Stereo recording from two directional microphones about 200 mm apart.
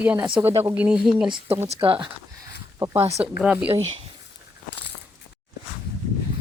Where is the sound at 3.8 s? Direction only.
30° right (ahead or behind).